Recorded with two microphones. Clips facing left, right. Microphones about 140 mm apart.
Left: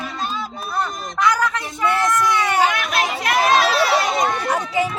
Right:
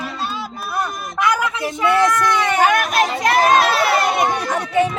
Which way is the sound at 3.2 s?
40° right (ahead or behind).